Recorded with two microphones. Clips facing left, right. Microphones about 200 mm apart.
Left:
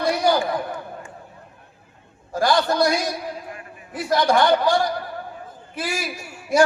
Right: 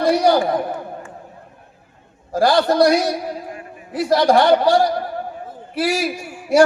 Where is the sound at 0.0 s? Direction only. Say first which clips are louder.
Right 5 dB; 35° right (ahead or behind).